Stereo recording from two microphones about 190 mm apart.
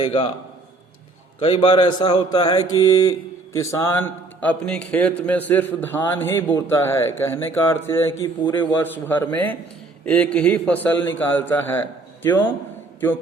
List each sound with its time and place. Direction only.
0.0 s speech: 30° left (ahead or behind)
1.4 s a man's voice: 30° left (ahead or behind); by 12.5 s 10° left (ahead or behind)